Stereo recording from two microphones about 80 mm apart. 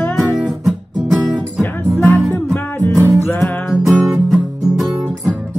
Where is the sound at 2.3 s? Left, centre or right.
Centre.